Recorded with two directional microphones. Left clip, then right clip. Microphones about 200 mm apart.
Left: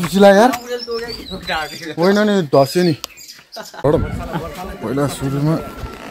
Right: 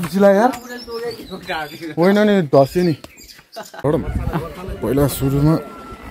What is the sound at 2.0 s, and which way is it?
Speech, 30° right (ahead or behind).